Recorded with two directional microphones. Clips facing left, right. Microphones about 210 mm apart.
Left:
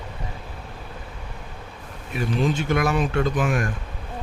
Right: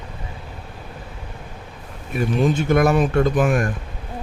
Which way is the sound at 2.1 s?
45° right (ahead or behind).